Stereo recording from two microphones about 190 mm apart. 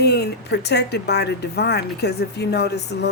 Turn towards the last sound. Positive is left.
turn(degrees=60)  # may be behind; listen again after turning